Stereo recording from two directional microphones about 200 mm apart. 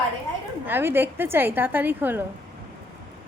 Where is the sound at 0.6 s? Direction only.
10° right (ahead or behind).